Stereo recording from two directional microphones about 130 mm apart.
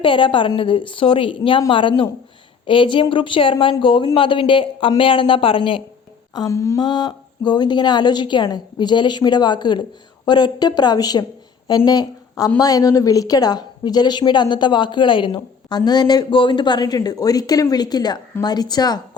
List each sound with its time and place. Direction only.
0.0 s a woman's voice: 40° left (ahead or behind)
6.3 s a woman's voice: 25° left (ahead or behind)